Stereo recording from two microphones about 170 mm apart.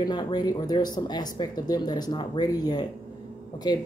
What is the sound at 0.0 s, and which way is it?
Speech, 25° left (ahead or behind).